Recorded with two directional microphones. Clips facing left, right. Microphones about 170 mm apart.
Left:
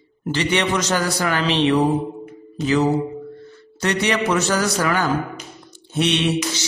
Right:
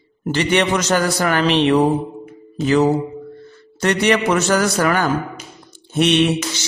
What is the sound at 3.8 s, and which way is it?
A man's voice, 55° right (ahead or behind).